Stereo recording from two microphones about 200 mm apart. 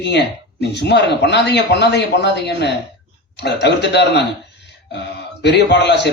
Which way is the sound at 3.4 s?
60° left (ahead or behind).